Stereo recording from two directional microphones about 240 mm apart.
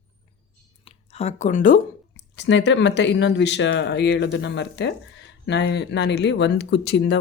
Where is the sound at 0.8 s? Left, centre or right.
Left.